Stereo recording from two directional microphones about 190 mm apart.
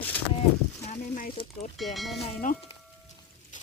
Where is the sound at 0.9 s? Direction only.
45° left (ahead or behind).